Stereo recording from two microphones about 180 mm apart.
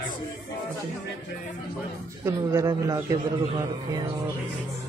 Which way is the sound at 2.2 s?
15° right (ahead or behind).